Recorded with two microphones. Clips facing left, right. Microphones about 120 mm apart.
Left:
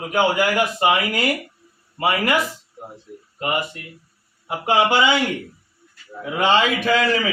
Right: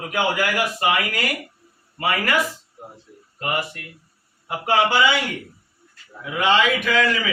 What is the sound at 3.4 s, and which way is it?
A man's voice, 20° left (ahead or behind).